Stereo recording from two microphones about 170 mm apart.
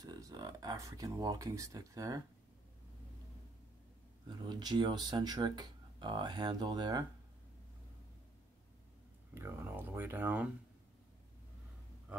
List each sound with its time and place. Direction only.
0.0 s speech: 25° right (ahead or behind)
4.3 s speech: 25° right (ahead or behind)
9.3 s speech: 15° right (ahead or behind)